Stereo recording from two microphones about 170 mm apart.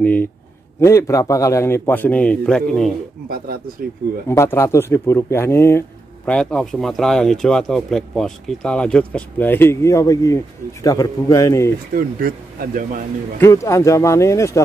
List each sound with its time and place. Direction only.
0.0 s a man's voice: 10° left (ahead or behind)
3.3 s speech: 60° right (ahead or behind)
4.3 s a man's voice: 15° left (ahead or behind)
6.3 s speech: 5° left (ahead or behind)
11.9 s speech: 60° right (ahead or behind)
13.4 s a man's voice: 15° left (ahead or behind)